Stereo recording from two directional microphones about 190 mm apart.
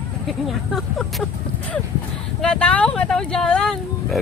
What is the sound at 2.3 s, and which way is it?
Speech, 5° left (ahead or behind).